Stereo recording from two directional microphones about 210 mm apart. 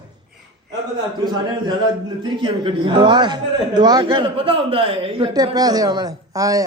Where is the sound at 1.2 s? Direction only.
20° right (ahead or behind).